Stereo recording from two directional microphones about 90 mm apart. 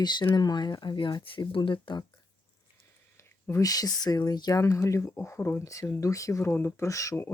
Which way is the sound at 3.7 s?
45° left (ahead or behind).